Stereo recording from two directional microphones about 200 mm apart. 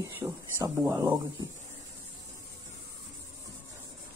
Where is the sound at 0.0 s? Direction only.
15° right (ahead or behind).